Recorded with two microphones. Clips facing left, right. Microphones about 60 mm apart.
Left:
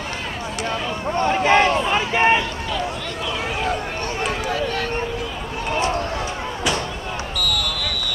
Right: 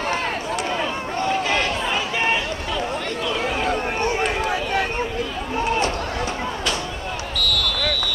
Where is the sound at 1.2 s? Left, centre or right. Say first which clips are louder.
Left 6 dB; left.